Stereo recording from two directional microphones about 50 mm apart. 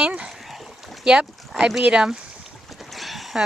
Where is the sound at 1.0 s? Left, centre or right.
Centre.